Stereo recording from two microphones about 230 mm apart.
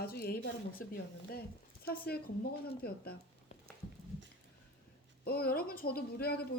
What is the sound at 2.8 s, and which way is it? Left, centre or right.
Speech, left.